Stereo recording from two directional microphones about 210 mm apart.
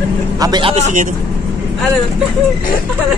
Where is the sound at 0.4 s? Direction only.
20° right (ahead or behind).